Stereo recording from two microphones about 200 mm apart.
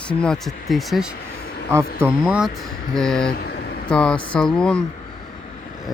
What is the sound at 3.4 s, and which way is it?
Vehicle, 50° left (ahead or behind).